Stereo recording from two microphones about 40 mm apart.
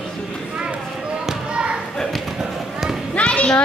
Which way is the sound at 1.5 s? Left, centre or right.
Right.